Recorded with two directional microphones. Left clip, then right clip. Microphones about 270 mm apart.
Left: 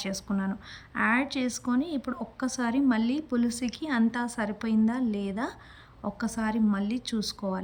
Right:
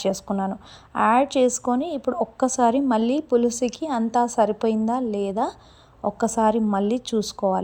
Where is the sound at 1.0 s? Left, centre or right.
Centre.